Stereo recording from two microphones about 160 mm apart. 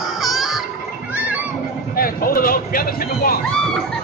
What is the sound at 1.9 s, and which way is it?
Speech, 65° left (ahead or behind).